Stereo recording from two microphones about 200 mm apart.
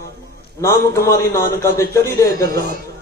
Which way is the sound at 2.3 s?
50° right (ahead or behind).